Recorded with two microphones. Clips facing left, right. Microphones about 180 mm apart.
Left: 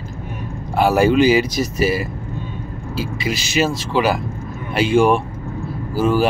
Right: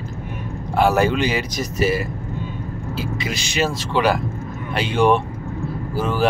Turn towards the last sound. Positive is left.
turn(degrees=10)  # may be behind; listen again after turning